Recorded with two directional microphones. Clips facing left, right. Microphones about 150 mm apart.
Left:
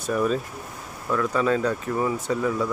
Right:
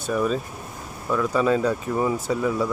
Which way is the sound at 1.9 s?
20° right (ahead or behind).